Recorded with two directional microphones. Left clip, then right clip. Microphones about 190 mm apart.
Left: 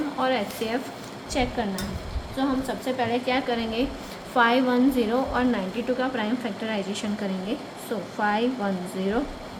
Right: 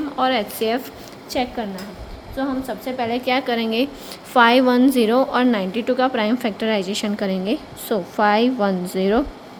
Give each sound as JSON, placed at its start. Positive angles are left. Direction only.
{"t": 0.2, "sound": "a woman's voice", "side_deg": -50}
{"t": 1.3, "sound": "speech", "side_deg": -40}
{"t": 2.6, "sound": "a woman's voice", "side_deg": -40}